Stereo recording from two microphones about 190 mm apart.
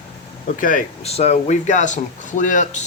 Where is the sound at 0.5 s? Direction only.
45° left (ahead or behind).